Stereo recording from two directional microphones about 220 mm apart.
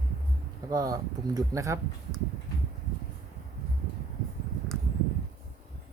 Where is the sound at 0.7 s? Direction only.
15° right (ahead or behind).